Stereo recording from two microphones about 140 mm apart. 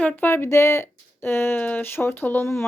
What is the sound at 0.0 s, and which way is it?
Speech, 10° left (ahead or behind).